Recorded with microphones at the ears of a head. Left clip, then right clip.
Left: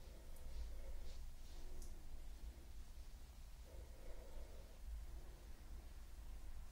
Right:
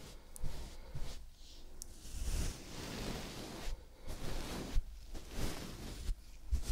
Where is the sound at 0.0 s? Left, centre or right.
Right.